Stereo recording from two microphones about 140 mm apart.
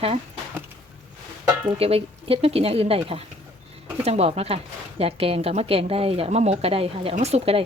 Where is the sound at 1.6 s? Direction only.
40° right (ahead or behind).